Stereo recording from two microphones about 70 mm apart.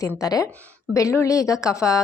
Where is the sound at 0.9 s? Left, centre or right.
Left.